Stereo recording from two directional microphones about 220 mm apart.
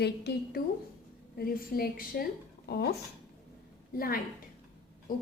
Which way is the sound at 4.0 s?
40° left (ahead or behind).